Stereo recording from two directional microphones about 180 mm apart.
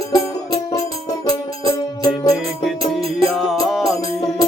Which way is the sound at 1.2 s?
20° left (ahead or behind).